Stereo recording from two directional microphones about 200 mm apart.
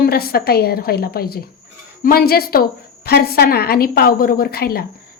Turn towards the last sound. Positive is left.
turn(degrees=50)  # may be behind; listen again after turning